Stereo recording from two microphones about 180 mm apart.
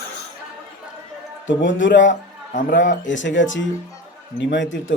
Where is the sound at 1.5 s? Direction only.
90° left.